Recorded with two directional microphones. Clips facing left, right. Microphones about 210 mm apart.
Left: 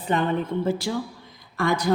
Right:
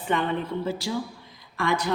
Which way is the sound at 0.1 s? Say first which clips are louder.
Left 3 dB; 45° left (ahead or behind).